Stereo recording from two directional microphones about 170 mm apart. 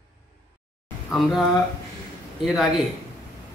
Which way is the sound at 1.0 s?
Centre (ahead or behind).